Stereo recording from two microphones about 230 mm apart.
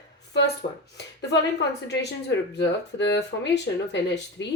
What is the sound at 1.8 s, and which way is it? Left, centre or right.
Speech, left.